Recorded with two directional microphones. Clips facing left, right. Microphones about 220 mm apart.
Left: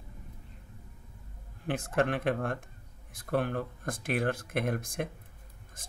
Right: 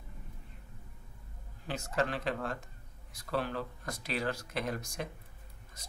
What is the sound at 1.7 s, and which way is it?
Speech, 55° left (ahead or behind).